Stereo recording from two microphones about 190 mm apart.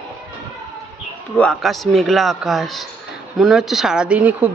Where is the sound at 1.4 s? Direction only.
Centre (ahead or behind).